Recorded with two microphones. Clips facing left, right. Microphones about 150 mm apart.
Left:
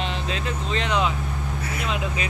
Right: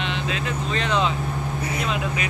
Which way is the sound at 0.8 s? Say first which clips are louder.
Right 1 dB; 15° left (ahead or behind).